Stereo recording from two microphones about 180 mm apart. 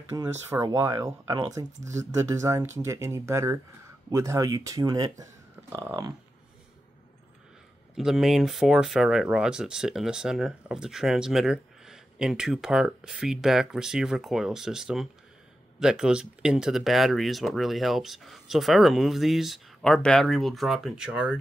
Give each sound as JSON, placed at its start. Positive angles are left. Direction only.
{"t": 0.1, "sound": "speech", "side_deg": -15}
{"t": 7.9, "sound": "speech", "side_deg": -5}